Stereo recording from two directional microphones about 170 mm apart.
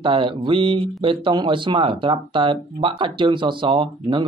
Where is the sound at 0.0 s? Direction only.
30° right (ahead or behind).